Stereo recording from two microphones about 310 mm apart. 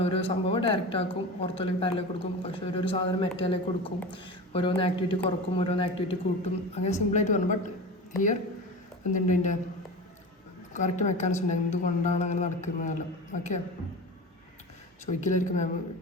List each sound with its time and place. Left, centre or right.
0.0 s a man's voice: centre
9.1 s a woman's voice: left
10.8 s a woman's voice: left
15.0 s a woman's voice: left